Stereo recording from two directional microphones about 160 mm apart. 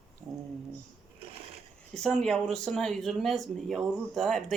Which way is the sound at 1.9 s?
5° left (ahead or behind).